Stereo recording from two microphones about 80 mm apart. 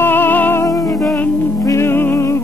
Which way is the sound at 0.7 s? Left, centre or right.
Left.